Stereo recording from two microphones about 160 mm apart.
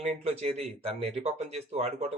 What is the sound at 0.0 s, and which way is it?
Speech, 40° right (ahead or behind).